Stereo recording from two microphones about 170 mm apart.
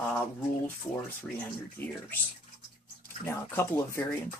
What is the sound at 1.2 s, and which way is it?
Speech, 5° left (ahead or behind).